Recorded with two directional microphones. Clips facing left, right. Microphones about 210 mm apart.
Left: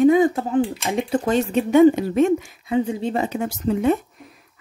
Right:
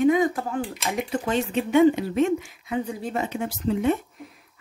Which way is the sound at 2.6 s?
25° left (ahead or behind).